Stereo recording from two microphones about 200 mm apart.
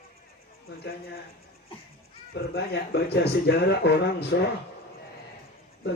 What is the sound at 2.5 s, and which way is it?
Speech, 55° left (ahead or behind).